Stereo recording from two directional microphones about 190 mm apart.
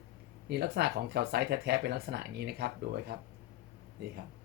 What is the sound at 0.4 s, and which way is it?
Speech, 60° right (ahead or behind).